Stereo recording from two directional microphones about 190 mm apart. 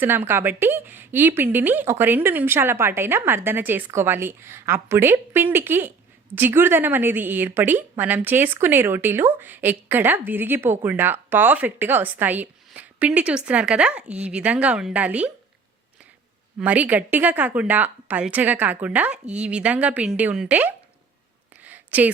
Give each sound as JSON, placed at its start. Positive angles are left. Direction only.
{"t": 0.0, "sound": "a woman's voice", "side_deg": -10}
{"t": 16.6, "sound": "a woman's voice", "side_deg": -5}
{"t": 21.6, "sound": "a sound", "side_deg": -10}